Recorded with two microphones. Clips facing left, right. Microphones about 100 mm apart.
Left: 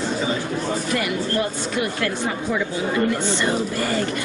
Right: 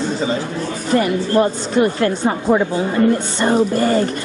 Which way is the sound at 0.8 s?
35° right (ahead or behind).